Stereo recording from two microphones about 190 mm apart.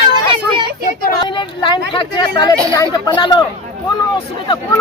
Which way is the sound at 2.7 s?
20° left (ahead or behind).